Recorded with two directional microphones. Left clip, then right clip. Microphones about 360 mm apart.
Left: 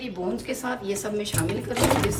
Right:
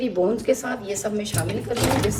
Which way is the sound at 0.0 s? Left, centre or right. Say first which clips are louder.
Right 9 dB; centre.